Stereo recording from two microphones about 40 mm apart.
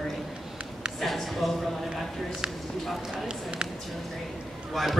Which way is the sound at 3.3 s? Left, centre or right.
Right.